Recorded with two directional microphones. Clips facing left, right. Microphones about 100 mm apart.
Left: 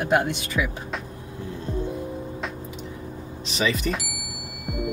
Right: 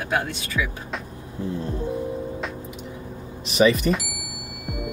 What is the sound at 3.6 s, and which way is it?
Speech, 5° right (ahead or behind).